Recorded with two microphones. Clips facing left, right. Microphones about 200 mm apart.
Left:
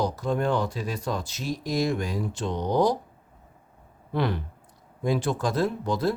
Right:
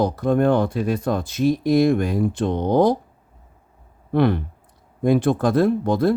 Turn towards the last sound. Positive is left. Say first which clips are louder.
# right 7 dB
turn(degrees=-55)  # may be behind; listen again after turning